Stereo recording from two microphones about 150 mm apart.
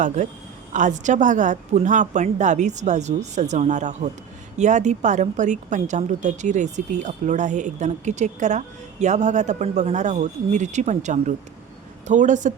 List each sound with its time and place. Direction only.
0.7 s a woman's voice: 55° right (ahead or behind)